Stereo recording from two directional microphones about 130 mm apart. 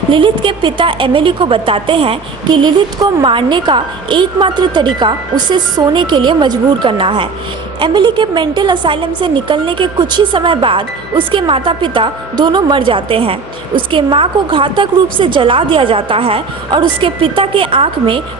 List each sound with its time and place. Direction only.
0.1 s a woman's voice: 40° right (ahead or behind)
2.6 s a woman's voice: 30° right (ahead or behind)